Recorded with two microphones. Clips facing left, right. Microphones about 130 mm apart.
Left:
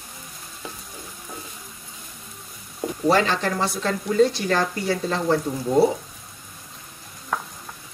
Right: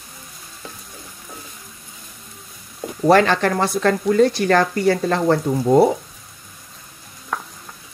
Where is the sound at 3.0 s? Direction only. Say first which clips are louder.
Right 6 dB; 60° right (ahead or behind).